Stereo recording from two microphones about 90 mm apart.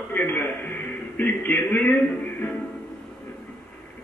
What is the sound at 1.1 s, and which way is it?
Speech, 20° left (ahead or behind).